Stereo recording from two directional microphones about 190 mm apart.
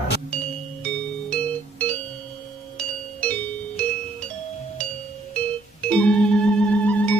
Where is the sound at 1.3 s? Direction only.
10° left (ahead or behind).